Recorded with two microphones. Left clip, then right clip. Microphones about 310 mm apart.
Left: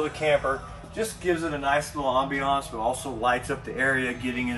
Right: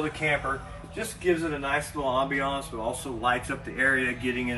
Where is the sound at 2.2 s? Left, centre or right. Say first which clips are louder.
Left 3 dB; left.